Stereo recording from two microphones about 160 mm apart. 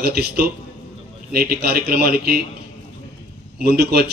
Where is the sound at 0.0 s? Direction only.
75° right (ahead or behind).